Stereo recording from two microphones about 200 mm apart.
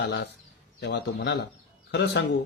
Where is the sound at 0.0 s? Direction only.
55° left (ahead or behind).